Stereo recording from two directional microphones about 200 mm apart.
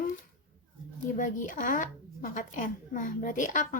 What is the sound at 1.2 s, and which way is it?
A woman's voice, 40° left (ahead or behind).